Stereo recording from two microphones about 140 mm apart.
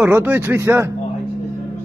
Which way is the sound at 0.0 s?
15° right (ahead or behind).